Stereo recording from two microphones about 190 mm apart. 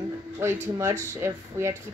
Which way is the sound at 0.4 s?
15° right (ahead or behind).